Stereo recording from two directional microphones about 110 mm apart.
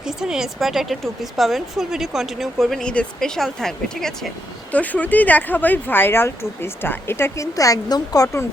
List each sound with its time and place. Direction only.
0.0 s speech: 5° right (ahead or behind); by 8.4 s 30° left (ahead or behind)